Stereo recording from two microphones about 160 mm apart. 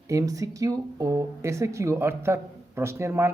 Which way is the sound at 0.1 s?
20° right (ahead or behind).